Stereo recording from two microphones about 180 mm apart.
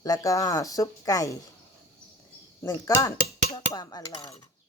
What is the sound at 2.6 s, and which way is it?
Speech, 20° left (ahead or behind).